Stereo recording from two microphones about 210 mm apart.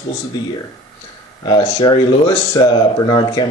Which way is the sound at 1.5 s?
20° left (ahead or behind).